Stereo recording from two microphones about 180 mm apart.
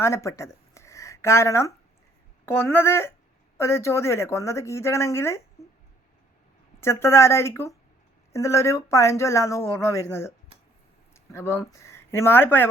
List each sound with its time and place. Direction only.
0.0 s speech: 15° left (ahead or behind)
6.7 s speech: 15° left (ahead or behind)
11.1 s a sound: 15° left (ahead or behind)
11.8 s speech: 15° left (ahead or behind)